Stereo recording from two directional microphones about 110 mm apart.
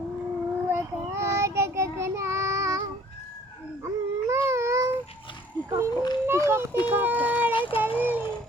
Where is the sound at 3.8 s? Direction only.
25° right (ahead or behind).